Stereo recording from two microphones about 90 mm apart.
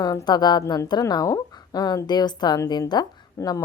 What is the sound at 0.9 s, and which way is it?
Speech, 45° left (ahead or behind).